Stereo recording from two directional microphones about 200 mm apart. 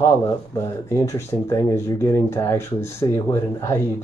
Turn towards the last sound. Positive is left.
turn(degrees=15)  # may be behind; listen again after turning